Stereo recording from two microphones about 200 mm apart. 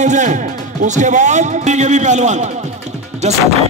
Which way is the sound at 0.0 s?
35° right (ahead or behind).